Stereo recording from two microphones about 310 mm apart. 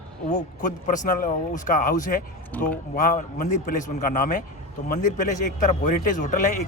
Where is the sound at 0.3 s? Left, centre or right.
Left.